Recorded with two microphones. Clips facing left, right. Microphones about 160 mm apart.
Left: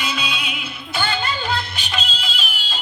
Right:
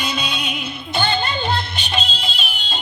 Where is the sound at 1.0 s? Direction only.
25° right (ahead or behind).